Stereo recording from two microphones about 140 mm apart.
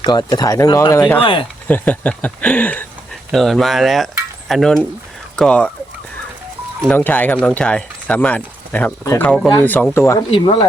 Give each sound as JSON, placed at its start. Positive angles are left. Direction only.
{"t": 0.0, "sound": "speech", "side_deg": 30}
{"t": 1.2, "sound": "speech", "side_deg": 40}
{"t": 1.6, "sound": "speech", "side_deg": 10}
{"t": 3.3, "sound": "cutlery", "side_deg": 0}
{"t": 5.4, "sound": "speech", "side_deg": 10}
{"t": 6.9, "sound": "speech", "side_deg": 10}
{"t": 10.3, "sound": "speech", "side_deg": 40}